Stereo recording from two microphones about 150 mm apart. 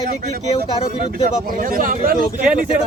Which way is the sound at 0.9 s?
60° right (ahead or behind).